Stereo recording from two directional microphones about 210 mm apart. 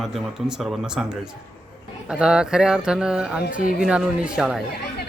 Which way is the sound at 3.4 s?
40° left (ahead or behind).